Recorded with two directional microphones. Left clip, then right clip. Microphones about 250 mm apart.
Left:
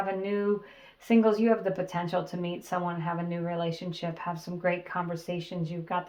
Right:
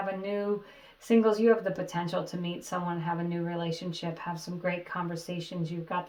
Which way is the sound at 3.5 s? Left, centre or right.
Left.